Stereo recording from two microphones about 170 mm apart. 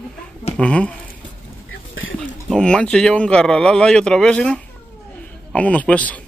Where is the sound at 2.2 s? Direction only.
5° left (ahead or behind).